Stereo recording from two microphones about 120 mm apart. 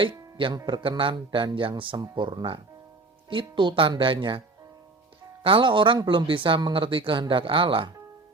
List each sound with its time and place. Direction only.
0.0 s speech: 45° right (ahead or behind)